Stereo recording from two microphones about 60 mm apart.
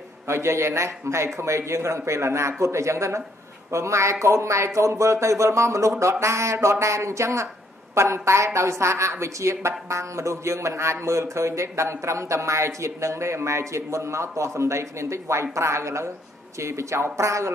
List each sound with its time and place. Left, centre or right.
0.3 s a woman's voice: right